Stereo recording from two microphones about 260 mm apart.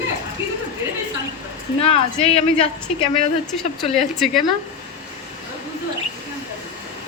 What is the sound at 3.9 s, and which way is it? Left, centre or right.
Speech, centre.